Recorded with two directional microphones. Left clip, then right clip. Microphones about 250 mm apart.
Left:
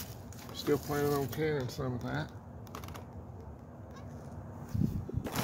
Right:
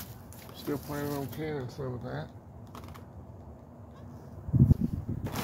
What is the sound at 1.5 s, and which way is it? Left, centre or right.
Speech, left.